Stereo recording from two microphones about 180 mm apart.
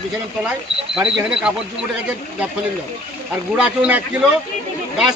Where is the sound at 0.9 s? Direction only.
5° right (ahead or behind).